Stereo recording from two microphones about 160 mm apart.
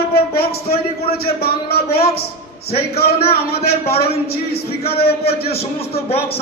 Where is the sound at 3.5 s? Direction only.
80° left.